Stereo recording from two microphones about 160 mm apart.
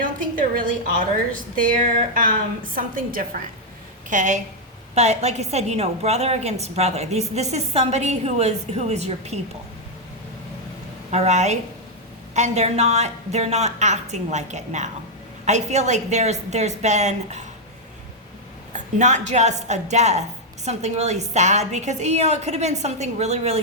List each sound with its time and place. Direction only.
0.0 s a sound: 55° right (ahead or behind)
1.7 s a woman's voice: 55° right (ahead or behind)
11.1 s a woman's voice: 45° right (ahead or behind)
18.7 s a woman's voice: 50° right (ahead or behind)